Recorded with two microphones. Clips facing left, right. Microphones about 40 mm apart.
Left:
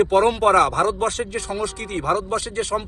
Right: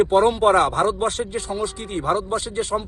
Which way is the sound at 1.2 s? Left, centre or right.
Left.